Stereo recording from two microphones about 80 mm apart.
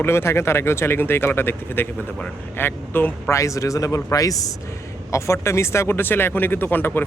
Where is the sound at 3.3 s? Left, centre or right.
Left.